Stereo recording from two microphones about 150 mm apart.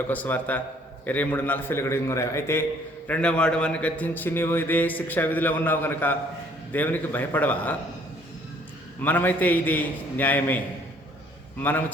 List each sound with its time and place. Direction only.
0.1 s a man's voice: 10° left (ahead or behind)
3.1 s a man's voice: 5° left (ahead or behind)
9.0 s a man's voice: 10° left (ahead or behind)